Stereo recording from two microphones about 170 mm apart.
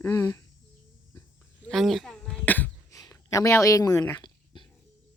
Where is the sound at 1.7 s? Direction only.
Centre (ahead or behind); by 4.7 s 30° left (ahead or behind).